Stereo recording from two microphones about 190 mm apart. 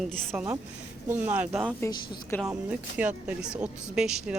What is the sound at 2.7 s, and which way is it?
Speech, 5° right (ahead or behind).